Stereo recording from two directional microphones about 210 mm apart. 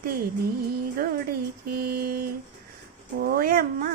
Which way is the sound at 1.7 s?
45° right (ahead or behind).